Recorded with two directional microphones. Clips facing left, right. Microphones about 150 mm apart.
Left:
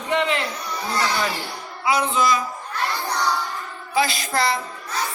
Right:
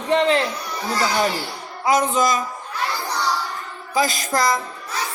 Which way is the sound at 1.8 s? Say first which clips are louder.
Right 2 dB; 45° right (ahead or behind).